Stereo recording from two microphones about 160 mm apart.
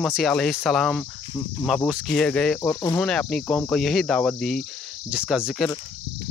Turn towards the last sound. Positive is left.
turn(degrees=-5)  # may be behind; listen again after turning